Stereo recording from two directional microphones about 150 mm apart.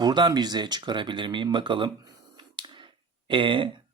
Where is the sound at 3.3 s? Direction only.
35° right (ahead or behind).